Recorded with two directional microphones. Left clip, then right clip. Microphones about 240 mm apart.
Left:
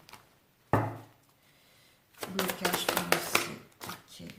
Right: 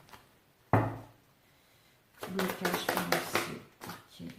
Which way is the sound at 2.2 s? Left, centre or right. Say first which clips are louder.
Left 2 dB; left.